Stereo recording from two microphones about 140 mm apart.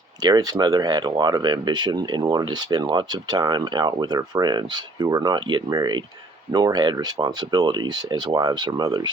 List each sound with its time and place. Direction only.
0.2 s speech: 30° right (ahead or behind)